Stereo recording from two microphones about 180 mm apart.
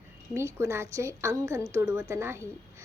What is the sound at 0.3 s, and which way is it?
A woman's voice, 15° right (ahead or behind).